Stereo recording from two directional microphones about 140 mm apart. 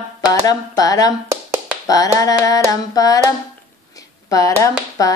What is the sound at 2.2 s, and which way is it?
Speech, 25° left (ahead or behind).